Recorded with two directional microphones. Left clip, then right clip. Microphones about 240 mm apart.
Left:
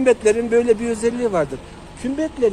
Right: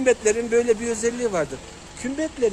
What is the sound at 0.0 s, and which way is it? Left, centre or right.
Speech, centre.